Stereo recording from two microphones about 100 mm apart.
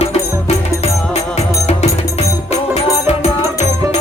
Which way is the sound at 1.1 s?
90° left.